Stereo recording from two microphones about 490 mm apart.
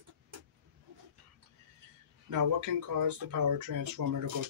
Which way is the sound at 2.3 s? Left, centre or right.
Right.